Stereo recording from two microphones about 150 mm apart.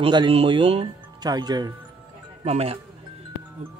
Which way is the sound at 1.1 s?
25° right (ahead or behind).